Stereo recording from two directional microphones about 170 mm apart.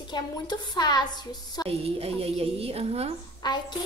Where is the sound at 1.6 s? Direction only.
35° right (ahead or behind).